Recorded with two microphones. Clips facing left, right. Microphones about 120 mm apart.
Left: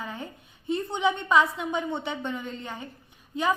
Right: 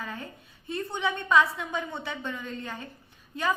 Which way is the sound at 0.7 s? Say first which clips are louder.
Left 4 dB; 20° left (ahead or behind).